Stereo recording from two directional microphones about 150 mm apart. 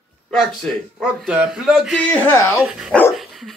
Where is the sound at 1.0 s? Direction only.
Centre (ahead or behind).